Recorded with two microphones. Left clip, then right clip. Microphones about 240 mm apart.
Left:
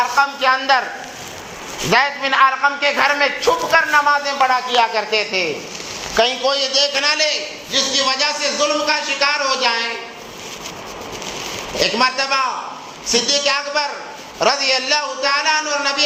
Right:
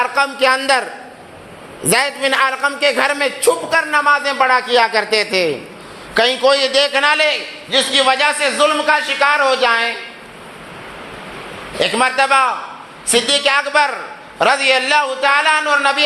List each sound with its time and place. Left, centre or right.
0.2 s a man's voice: right
1.9 s a man's voice: right
11.8 s a man's voice: right